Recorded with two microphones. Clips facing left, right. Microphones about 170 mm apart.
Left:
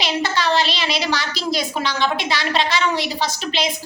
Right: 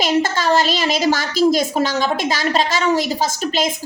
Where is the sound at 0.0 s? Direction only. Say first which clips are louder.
Right 4 dB; 45° right (ahead or behind).